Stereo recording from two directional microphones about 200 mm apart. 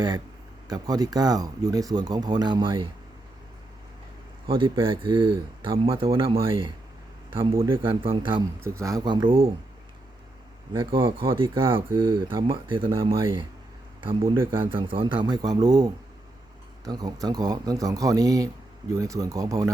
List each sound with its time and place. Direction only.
0.7 s speech: 20° right (ahead or behind)
4.4 s speech: 25° right (ahead or behind)
10.8 s speech: 25° right (ahead or behind)